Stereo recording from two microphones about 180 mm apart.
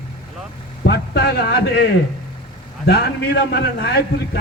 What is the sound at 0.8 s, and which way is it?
A man's voice, 65° left (ahead or behind).